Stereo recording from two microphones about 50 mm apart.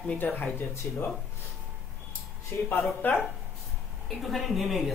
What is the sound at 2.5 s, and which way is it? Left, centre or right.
Speech, left.